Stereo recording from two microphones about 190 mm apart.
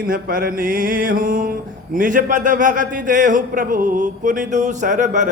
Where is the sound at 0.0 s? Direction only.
50° right (ahead or behind).